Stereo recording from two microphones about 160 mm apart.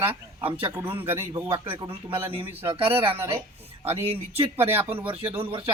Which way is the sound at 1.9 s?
35° right (ahead or behind).